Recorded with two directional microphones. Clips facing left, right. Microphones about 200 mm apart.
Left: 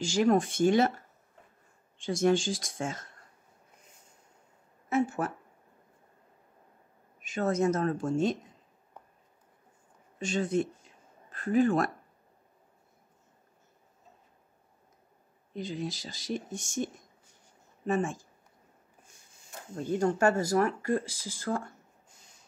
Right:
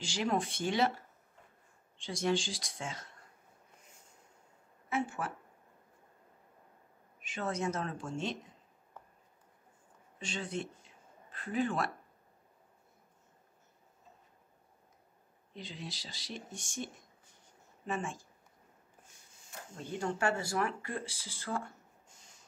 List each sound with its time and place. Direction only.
0.0 s speech: 45° left (ahead or behind)
2.0 s speech: 50° left (ahead or behind)
4.8 s speech: 40° left (ahead or behind)
7.2 s speech: 45° left (ahead or behind)
9.0 s a sound: 20° left (ahead or behind)
10.1 s speech: 45° left (ahead or behind)
15.5 s speech: 45° left (ahead or behind)
19.7 s speech: 40° left (ahead or behind)